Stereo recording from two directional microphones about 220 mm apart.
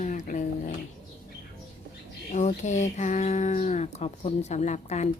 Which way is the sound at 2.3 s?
30° left (ahead or behind).